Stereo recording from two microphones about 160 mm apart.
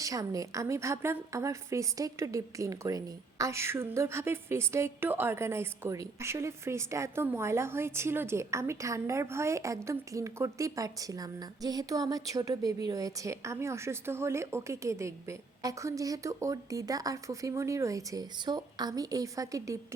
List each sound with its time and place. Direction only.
0.0 s a woman's voice: 20° right (ahead or behind)